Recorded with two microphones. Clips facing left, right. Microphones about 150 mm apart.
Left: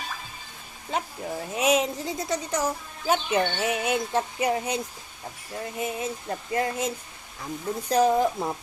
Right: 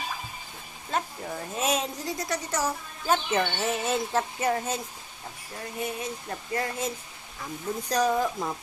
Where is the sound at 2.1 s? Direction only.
20° left (ahead or behind).